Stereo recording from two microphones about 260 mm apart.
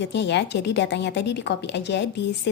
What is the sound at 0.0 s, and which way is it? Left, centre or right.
A woman's voice, left.